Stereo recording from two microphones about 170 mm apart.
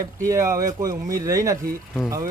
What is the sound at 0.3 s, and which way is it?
Speech, 15° right (ahead or behind).